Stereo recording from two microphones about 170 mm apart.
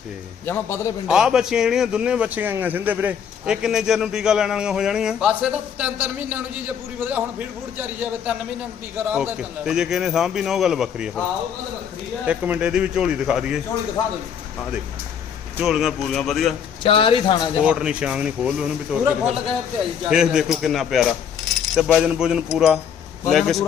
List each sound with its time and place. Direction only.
0.4 s a man's voice: 15° left (ahead or behind)
1.0 s a man's voice: 5° right (ahead or behind)
12.2 s speech: 10° right (ahead or behind)
15.5 s a man's voice: 5° right (ahead or behind)
16.8 s a man's voice: 30° left (ahead or behind)
17.7 s a man's voice: 5° right (ahead or behind)